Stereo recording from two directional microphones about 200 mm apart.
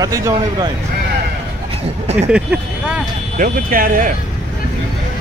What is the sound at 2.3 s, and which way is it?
Vehicle, 5° right (ahead or behind).